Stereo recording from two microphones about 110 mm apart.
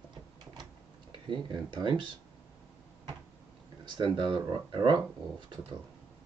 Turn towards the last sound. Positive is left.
turn(degrees=-45)  # may be behind; listen again after turning